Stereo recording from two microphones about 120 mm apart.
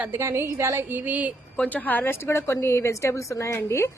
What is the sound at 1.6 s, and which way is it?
A woman's voice, 15° left (ahead or behind).